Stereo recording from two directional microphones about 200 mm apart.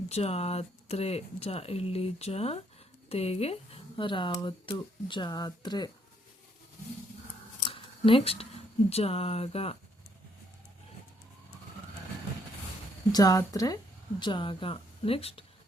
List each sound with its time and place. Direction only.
0.1 s speech: 30° left (ahead or behind)
7.6 s a sound: 25° left (ahead or behind)
8.9 s speech: 30° left (ahead or behind)
13.1 s speech: 20° left (ahead or behind)